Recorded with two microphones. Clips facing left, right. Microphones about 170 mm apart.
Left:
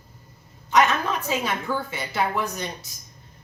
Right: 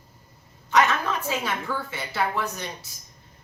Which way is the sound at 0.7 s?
15° left (ahead or behind).